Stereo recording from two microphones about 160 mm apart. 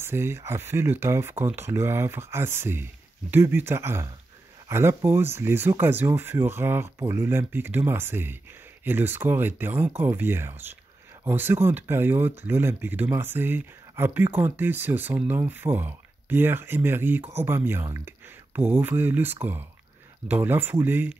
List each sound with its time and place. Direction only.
0.0 s speech: 15° right (ahead or behind)